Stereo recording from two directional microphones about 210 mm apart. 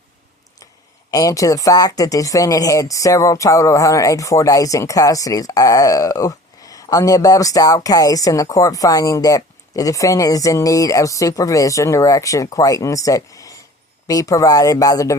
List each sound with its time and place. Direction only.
1.1 s speech: 15° left (ahead or behind)